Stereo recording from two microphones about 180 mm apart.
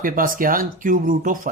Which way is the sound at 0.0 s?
50° right (ahead or behind).